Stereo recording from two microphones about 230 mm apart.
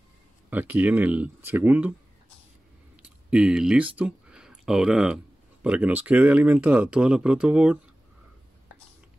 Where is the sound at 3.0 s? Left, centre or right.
Centre.